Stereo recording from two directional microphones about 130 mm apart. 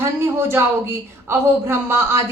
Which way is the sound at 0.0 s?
20° right (ahead or behind).